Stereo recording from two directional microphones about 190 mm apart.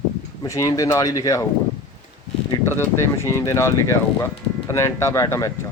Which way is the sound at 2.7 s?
15° left (ahead or behind).